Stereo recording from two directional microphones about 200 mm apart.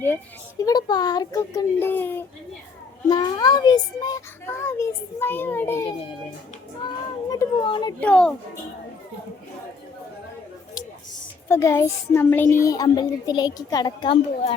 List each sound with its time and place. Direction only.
0.6 s a child's voice: 20° left (ahead or behind)
3.1 s a child's voice: 20° left (ahead or behind)
7.3 s speech: 20° left (ahead or behind)
8.0 s a child's voice: 5° left (ahead or behind)
11.4 s a child's voice: 15° left (ahead or behind)